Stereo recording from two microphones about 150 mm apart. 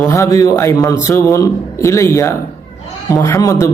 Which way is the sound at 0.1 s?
20° left (ahead or behind).